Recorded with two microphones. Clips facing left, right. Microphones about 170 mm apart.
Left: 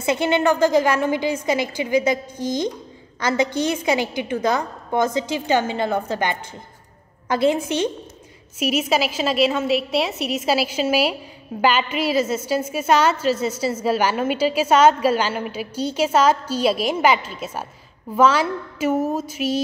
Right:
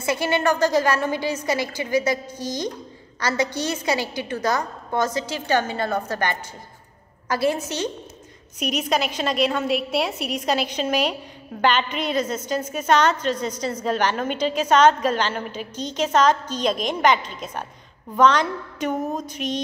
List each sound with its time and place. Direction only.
0.0 s a woman's voice: 20° left (ahead or behind)
3.5 s a woman's voice: 20° left (ahead or behind)
8.5 s a woman's voice: 5° left (ahead or behind)